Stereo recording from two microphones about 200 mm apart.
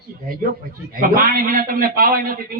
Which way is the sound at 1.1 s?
45° right (ahead or behind).